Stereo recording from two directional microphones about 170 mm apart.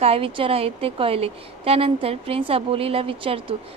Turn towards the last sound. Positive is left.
turn(degrees=-30)  # may be behind; listen again after turning